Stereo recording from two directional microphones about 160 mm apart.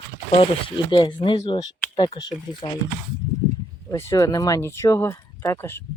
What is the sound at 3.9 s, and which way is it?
Speech, 20° left (ahead or behind).